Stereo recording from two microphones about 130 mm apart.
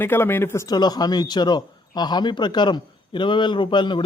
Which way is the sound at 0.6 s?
30° left (ahead or behind).